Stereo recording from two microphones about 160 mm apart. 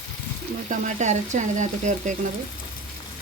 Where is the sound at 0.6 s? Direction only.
50° right (ahead or behind).